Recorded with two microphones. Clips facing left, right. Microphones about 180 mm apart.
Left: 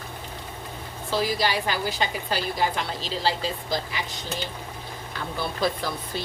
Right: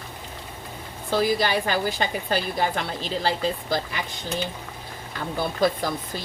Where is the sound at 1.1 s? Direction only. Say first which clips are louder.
Right 3 dB; 50° right (ahead or behind).